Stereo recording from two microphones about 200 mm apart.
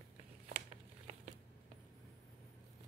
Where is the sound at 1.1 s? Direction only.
35° right (ahead or behind).